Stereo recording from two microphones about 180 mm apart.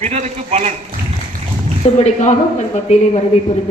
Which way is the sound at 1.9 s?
40° left (ahead or behind).